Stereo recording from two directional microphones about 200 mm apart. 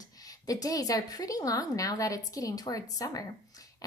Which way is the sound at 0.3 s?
20° left (ahead or behind).